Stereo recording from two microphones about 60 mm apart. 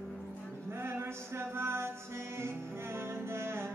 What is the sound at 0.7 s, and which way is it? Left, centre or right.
Music, right.